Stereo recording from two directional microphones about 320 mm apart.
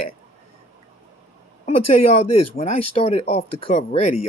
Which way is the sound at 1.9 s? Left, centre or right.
Centre.